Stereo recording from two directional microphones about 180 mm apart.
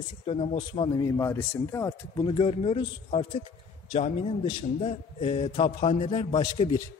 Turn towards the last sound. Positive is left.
turn(degrees=25)  # may be behind; listen again after turning